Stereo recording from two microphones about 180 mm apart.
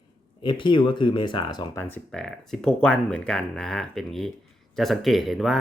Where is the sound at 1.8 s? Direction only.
5° left (ahead or behind).